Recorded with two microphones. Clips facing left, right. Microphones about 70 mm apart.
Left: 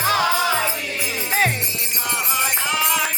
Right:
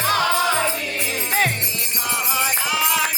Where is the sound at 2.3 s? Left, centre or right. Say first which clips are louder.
Even; centre.